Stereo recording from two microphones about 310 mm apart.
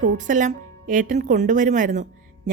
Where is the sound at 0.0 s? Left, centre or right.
Right.